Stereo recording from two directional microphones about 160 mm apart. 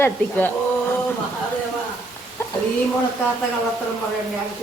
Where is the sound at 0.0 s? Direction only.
15° left (ahead or behind).